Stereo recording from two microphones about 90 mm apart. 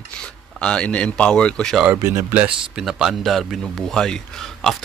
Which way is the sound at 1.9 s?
30° right (ahead or behind).